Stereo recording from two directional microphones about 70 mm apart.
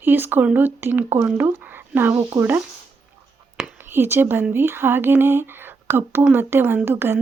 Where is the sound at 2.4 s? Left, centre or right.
Right.